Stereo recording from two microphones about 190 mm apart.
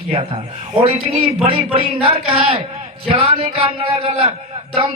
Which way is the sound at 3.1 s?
30° right (ahead or behind).